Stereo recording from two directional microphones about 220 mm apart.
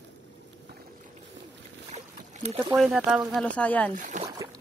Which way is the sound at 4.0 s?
35° right (ahead or behind).